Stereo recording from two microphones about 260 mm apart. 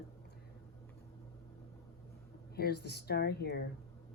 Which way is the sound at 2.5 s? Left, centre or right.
Left.